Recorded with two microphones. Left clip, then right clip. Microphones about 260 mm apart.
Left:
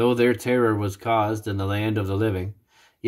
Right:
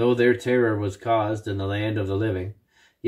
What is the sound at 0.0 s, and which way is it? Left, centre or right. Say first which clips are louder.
Speech: even; left.